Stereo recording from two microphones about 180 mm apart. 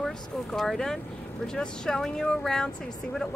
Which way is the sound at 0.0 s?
Centre (ahead or behind).